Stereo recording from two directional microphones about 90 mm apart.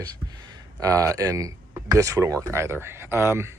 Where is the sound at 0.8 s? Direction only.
40° right (ahead or behind).